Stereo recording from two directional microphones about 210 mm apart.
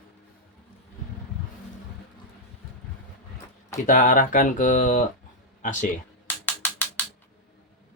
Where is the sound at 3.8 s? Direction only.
40° left (ahead or behind).